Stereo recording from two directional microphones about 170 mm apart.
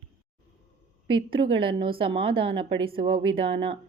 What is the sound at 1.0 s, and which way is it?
Speech, 30° right (ahead or behind).